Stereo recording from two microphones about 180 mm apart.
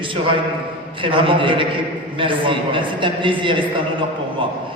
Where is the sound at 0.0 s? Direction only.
30° right (ahead or behind).